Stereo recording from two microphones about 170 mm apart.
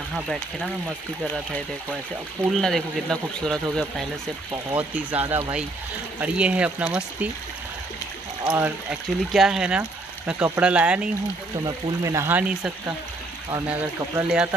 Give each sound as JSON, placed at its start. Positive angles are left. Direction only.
{"t": 0.1, "sound": "speech", "side_deg": 0}
{"t": 2.5, "sound": "speech", "side_deg": 5}
{"t": 4.7, "sound": "speech", "side_deg": -10}
{"t": 9.3, "sound": "speech", "side_deg": 0}
{"t": 11.6, "sound": "speech", "side_deg": -20}